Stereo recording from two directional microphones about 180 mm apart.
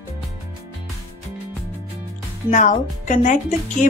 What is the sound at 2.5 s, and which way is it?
Speech, 45° left (ahead or behind).